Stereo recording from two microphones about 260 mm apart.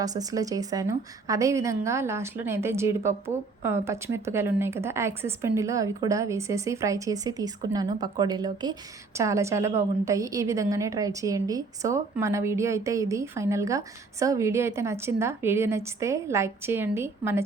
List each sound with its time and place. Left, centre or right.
0.0 s a woman's voice: centre